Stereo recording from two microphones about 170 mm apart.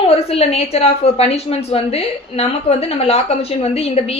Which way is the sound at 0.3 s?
35° left (ahead or behind).